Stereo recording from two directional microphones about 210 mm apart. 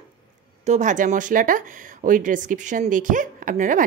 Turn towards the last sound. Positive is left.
turn(degrees=-40)  # may be behind; listen again after turning